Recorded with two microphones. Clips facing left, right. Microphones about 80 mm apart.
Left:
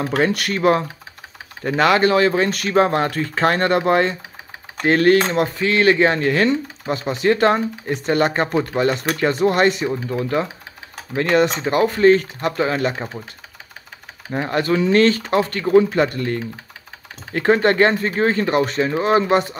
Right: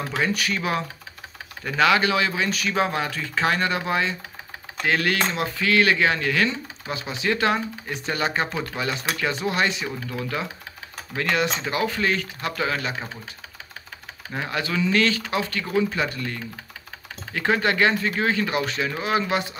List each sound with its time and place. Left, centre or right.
0.0 s speech: left
5.6 s speech: left
9.8 s speech: left
14.5 s speech: left